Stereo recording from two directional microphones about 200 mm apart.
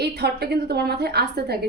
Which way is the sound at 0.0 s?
55° right (ahead or behind).